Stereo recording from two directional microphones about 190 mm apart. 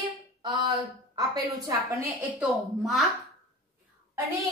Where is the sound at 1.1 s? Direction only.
20° right (ahead or behind).